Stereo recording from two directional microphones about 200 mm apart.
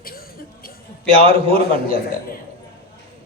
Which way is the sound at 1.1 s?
30° right (ahead or behind).